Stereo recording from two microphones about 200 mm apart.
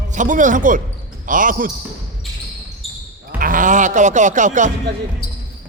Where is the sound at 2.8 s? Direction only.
Centre (ahead or behind).